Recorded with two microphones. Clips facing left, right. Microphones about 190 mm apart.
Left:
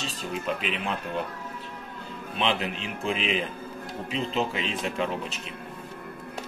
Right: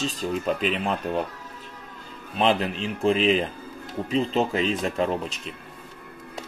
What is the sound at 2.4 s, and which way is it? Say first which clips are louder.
Speech: right 5 dB; 40° right (ahead or behind).